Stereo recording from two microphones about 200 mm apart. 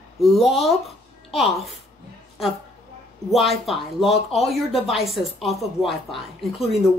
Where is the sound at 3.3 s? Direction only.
Centre (ahead or behind).